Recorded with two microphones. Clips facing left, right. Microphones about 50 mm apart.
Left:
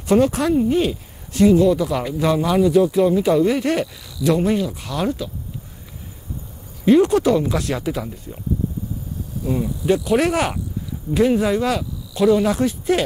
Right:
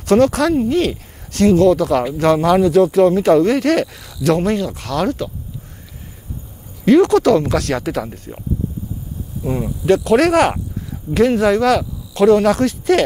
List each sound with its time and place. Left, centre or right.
0.0 s speech: right
6.8 s speech: right
9.4 s speech: right
10.0 s speech: right